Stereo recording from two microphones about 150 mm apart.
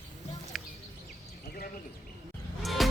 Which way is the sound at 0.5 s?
Centre (ahead or behind).